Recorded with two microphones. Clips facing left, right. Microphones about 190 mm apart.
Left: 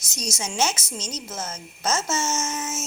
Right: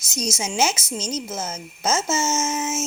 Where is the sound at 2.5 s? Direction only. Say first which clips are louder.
Right 5 dB; 25° right (ahead or behind).